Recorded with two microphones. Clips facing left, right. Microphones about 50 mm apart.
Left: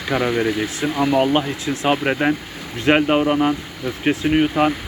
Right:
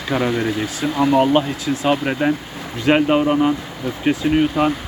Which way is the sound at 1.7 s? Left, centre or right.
Left.